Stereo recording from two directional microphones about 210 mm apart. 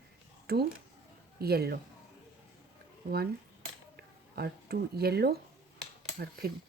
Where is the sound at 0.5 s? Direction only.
50° right (ahead or behind).